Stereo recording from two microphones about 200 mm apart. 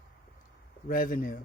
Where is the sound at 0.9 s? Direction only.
45° left (ahead or behind).